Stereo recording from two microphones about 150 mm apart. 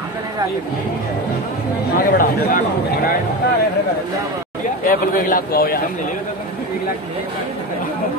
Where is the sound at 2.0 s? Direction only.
70° left (ahead or behind).